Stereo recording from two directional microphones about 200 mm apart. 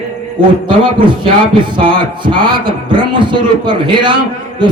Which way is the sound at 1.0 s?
25° right (ahead or behind).